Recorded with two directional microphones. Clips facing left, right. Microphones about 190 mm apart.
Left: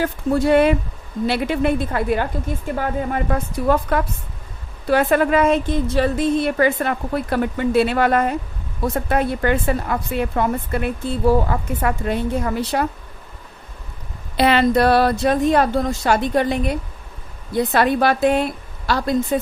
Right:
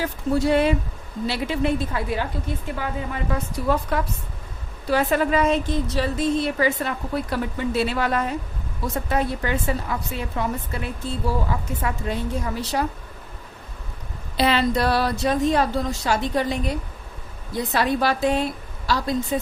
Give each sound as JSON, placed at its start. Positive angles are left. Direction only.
{"t": 0.0, "sound": "a woman's voice", "side_deg": 55}
{"t": 14.3, "sound": "speech", "side_deg": 60}